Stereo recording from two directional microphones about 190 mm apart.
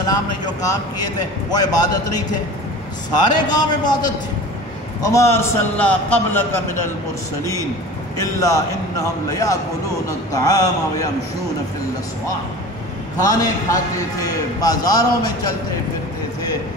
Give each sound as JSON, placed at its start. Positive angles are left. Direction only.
{"t": 0.0, "sound": "a man's voice", "side_deg": 20}
{"t": 5.0, "sound": "a man's voice", "side_deg": 15}
{"t": 8.2, "sound": "a man's voice", "side_deg": 15}
{"t": 13.2, "sound": "a man's voice", "side_deg": 20}